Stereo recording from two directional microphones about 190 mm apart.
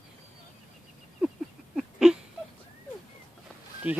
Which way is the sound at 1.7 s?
5° right (ahead or behind).